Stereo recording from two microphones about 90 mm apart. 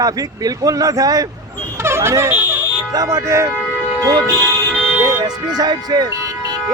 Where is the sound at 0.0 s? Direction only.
45° right (ahead or behind).